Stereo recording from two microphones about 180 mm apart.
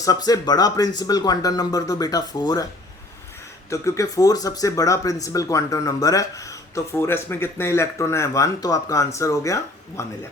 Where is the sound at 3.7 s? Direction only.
15° left (ahead or behind).